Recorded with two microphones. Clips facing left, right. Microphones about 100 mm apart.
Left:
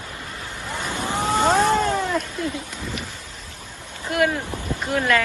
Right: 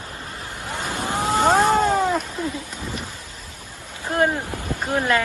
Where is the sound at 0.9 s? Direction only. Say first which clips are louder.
Even; 20° right (ahead or behind).